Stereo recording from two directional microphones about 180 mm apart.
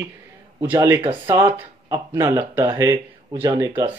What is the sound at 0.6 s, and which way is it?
Speech, 15° right (ahead or behind).